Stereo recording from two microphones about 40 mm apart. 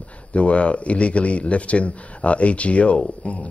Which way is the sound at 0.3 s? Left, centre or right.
Left.